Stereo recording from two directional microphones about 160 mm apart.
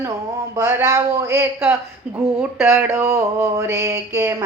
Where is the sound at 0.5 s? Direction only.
20° right (ahead or behind).